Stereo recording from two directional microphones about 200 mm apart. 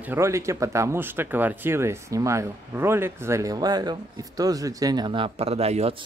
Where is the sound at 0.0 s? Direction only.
10° right (ahead or behind).